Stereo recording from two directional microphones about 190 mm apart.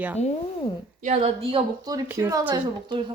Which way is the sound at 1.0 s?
30° right (ahead or behind).